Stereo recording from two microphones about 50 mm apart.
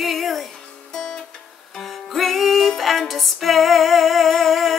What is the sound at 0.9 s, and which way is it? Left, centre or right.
Music, centre.